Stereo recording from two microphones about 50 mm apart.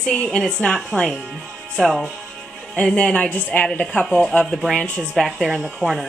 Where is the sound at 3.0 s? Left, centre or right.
Left.